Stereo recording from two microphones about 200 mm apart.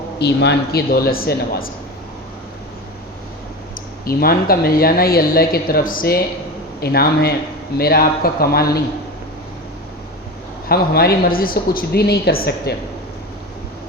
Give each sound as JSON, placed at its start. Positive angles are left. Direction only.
{"t": 0.2, "sound": "speech", "side_deg": 55}
{"t": 4.0, "sound": "speech", "side_deg": 50}
{"t": 10.7, "sound": "speech", "side_deg": 50}